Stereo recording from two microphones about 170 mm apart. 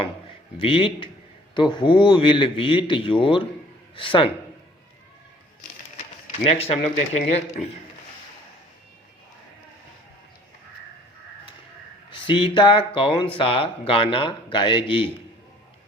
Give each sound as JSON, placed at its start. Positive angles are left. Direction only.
{"t": 0.6, "sound": "speech", "side_deg": 30}
{"t": 6.4, "sound": "speech", "side_deg": 35}
{"t": 12.1, "sound": "speech", "side_deg": 30}